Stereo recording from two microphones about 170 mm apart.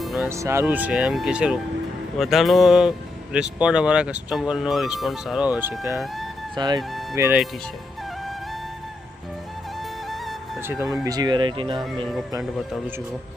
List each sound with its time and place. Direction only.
0.0 s music: centre (ahead or behind)
0.3 s speech: 15° right (ahead or behind)
6.6 s speech: 25° right (ahead or behind)
7.2 s speech: 15° right (ahead or behind)
10.1 s music: centre (ahead or behind)
10.6 s speech: 15° right (ahead or behind)